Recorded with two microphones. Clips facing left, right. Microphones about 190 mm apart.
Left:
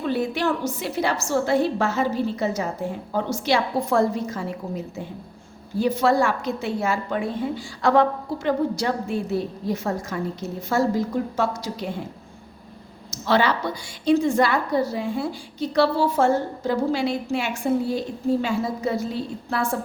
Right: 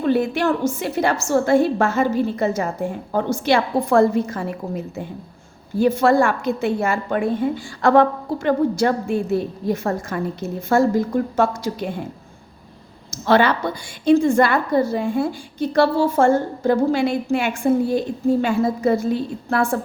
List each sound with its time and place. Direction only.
0.0 s a woman's voice: 50° right (ahead or behind)
13.1 s a woman's voice: 55° right (ahead or behind)